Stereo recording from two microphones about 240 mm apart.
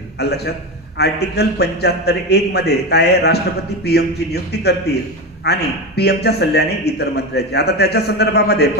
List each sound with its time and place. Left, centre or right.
0.2 s a man's voice: left